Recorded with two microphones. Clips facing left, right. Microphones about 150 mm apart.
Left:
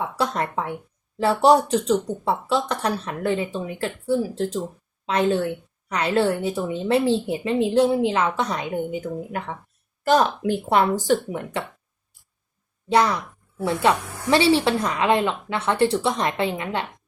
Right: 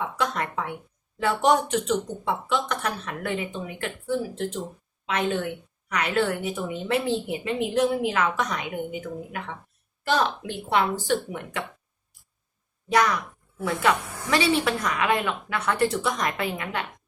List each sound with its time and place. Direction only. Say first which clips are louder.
0.0 s a woman's voice: left 3 dB; 35° left (ahead or behind)
12.9 s a woman's voice: left 3 dB; 30° left (ahead or behind)